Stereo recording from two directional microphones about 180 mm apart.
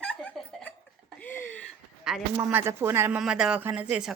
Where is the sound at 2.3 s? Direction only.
15° right (ahead or behind).